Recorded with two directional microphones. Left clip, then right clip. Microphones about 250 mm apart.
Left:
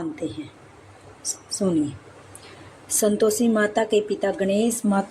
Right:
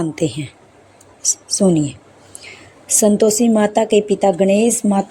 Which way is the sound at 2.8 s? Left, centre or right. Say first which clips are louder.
Right 7 dB; right.